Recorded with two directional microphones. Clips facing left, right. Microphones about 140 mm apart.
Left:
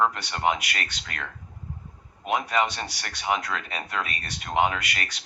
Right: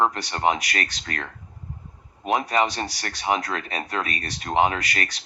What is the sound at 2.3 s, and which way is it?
Speech, 35° right (ahead or behind).